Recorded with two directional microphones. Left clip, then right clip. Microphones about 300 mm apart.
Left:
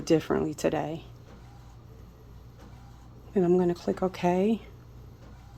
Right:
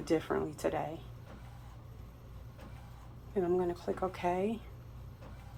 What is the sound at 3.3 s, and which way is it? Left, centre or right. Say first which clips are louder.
Speech: left 7 dB; left.